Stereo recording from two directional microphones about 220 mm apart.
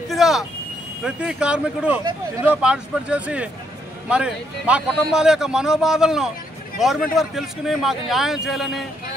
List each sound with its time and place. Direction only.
0.1 s vehicle: centre (ahead or behind)
1.0 s a man's voice: 5° right (ahead or behind)